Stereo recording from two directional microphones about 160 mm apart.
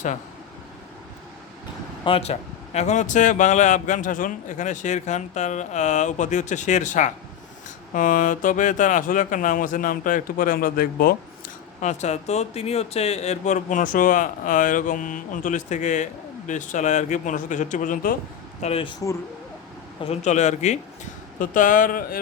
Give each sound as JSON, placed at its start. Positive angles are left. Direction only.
{"t": 2.0, "sound": "speech", "side_deg": 40}
{"t": 11.8, "sound": "speech", "side_deg": 45}
{"t": 18.6, "sound": "speech", "side_deg": 35}
{"t": 20.1, "sound": "speech", "side_deg": 45}